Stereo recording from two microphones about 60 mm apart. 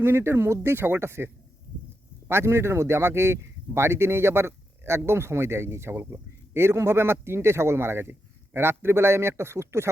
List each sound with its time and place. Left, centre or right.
0.0 s speech: right